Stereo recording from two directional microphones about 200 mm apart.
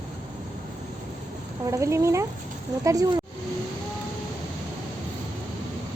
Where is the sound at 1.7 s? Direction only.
15° right (ahead or behind).